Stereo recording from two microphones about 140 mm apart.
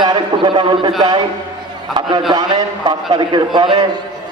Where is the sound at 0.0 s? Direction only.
30° right (ahead or behind).